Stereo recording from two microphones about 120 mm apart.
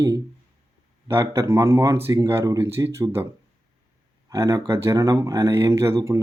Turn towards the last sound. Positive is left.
turn(degrees=-25)  # may be behind; listen again after turning